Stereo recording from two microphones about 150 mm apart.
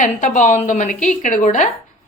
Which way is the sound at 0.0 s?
55° left (ahead or behind).